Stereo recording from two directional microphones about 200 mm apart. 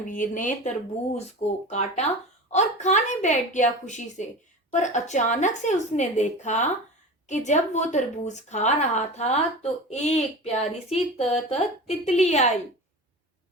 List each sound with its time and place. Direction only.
0.0 s a woman's voice: 40° left (ahead or behind)